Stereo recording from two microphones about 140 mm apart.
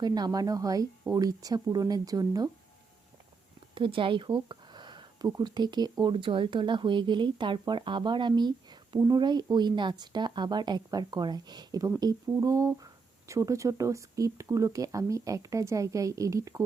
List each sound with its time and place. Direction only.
0.0 s speech: 30° right (ahead or behind)
3.8 s speech: 35° right (ahead or behind)